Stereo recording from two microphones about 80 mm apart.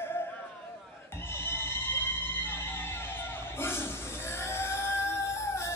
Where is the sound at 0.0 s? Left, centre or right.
Left.